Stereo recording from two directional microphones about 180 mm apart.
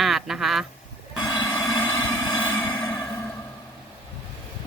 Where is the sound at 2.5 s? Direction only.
25° left (ahead or behind).